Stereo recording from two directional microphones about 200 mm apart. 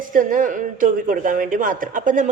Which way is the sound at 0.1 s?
40° right (ahead or behind).